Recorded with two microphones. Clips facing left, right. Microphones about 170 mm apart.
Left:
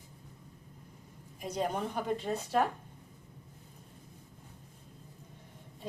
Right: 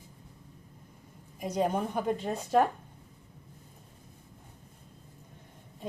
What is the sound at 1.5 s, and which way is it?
Speech, 50° right (ahead or behind).